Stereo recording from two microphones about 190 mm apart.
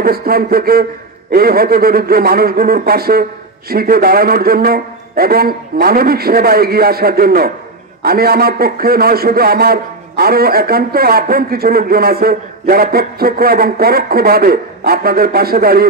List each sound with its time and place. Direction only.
0.0 s a man's voice: 50° right (ahead or behind)